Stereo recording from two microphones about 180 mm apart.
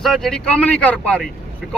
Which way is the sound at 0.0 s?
Centre (ahead or behind).